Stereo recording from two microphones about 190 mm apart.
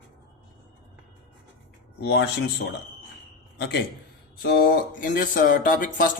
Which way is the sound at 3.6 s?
60° left (ahead or behind).